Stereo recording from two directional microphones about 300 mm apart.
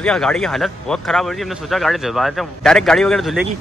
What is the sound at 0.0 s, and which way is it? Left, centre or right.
A man's voice, centre.